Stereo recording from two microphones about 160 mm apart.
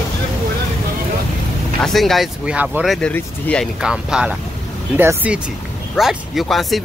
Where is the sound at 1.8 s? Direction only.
Centre (ahead or behind).